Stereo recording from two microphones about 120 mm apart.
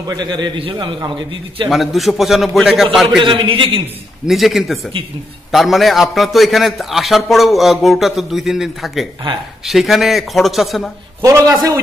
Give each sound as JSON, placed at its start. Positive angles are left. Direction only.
{"t": 0.0, "sound": "a man's voice", "side_deg": -35}
{"t": 1.7, "sound": "a man's voice", "side_deg": 0}
{"t": 3.3, "sound": "a man's voice", "side_deg": -45}
{"t": 4.3, "sound": "a man's voice", "side_deg": 0}
{"t": 11.2, "sound": "a man's voice", "side_deg": -30}